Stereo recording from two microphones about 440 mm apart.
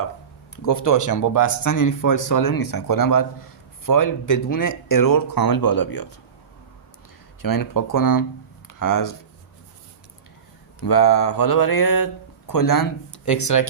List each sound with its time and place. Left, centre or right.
0.5 s speech: left
7.4 s speech: left
10.8 s speech: left